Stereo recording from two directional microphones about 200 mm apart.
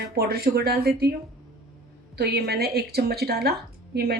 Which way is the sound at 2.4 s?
50° right (ahead or behind).